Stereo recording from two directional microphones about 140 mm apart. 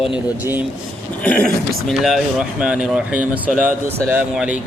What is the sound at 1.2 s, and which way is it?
Speech, 10° left (ahead or behind).